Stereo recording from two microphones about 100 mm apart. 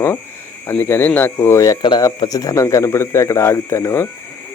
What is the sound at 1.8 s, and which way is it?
Speech, 50° left (ahead or behind).